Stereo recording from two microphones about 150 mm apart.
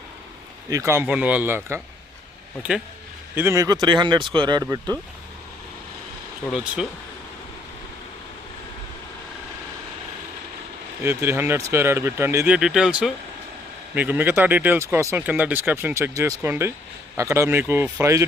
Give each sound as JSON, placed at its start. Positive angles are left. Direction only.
{"t": 0.7, "sound": "speech", "side_deg": -20}
{"t": 3.3, "sound": "speech", "side_deg": -20}
{"t": 11.0, "sound": "speech", "side_deg": -15}
{"t": 12.5, "sound": "speech", "side_deg": -5}